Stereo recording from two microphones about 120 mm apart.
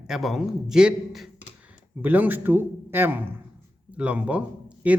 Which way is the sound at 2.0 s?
15° right (ahead or behind).